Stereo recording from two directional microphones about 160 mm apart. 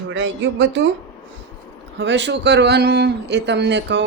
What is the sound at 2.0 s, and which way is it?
A man's voice, 90° right.